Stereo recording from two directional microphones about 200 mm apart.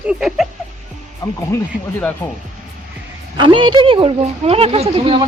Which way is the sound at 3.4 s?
25° right (ahead or behind).